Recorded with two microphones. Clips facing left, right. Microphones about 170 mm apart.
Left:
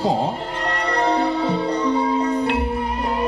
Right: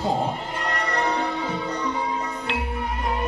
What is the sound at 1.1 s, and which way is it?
Music, 30° left (ahead or behind).